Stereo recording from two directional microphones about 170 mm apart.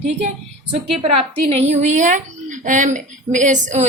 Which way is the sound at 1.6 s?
45° right (ahead or behind).